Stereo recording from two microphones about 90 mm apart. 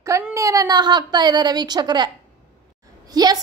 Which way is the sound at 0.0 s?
35° right (ahead or behind).